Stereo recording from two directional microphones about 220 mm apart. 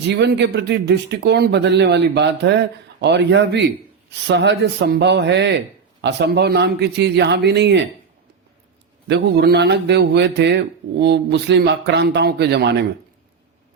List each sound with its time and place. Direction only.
0.1 s speech: 50° right (ahead or behind)
9.0 s speech: 50° right (ahead or behind)